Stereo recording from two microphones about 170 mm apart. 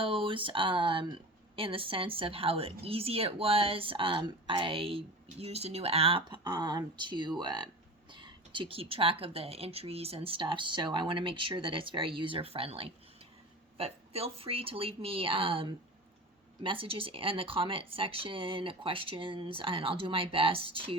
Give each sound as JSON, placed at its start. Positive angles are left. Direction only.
{"t": 0.0, "sound": "speech", "side_deg": -30}